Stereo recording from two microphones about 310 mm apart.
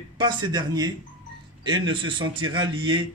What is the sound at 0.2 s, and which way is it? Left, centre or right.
A man's voice, centre.